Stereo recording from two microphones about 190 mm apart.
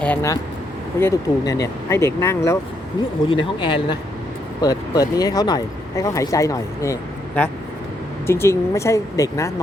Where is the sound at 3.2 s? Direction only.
25° left (ahead or behind).